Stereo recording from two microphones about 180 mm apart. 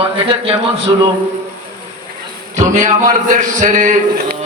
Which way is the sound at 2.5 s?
45° right (ahead or behind).